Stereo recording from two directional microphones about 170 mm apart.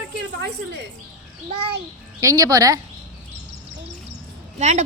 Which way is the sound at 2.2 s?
20° right (ahead or behind).